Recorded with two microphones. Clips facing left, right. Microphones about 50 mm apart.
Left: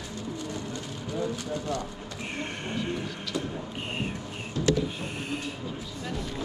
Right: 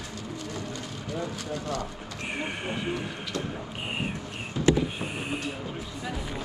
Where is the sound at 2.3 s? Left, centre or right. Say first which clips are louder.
Right 1 dB; centre.